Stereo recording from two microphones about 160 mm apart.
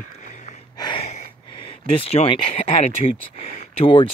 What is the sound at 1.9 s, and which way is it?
Speech, 35° left (ahead or behind).